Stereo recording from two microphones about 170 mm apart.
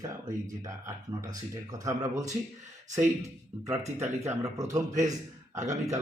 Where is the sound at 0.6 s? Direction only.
20° right (ahead or behind).